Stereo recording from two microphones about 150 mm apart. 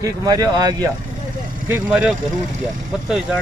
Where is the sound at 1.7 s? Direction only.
5° right (ahead or behind).